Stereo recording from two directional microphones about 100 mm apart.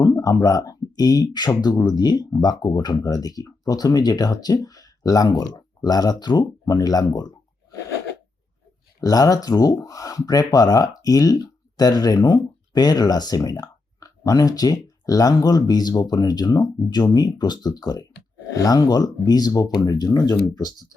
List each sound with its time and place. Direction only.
0.2 s speech: 35° left (ahead or behind)
9.0 s speech: 35° left (ahead or behind)